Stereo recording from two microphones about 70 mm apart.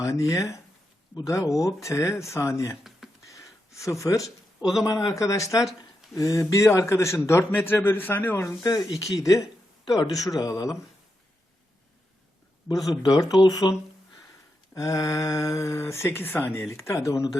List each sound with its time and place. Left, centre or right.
0.0 s speech: left
3.2 s gasp: left
4.8 s a man's voice: left
8.6 s speech: left
9.8 s speech: left
12.6 s speech: left
13.0 s speech: left
14.8 s a man's voice: left